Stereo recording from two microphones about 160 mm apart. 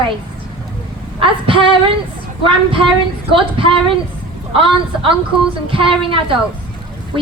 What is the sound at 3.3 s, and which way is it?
A woman's voice, 35° right (ahead or behind).